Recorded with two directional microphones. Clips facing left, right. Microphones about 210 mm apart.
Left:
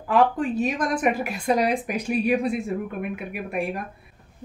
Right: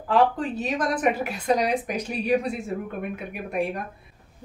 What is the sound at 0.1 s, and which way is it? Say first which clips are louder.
Speech: left 1 dB; 10° left (ahead or behind).